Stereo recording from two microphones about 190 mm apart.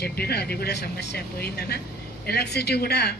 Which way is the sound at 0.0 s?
55° left (ahead or behind).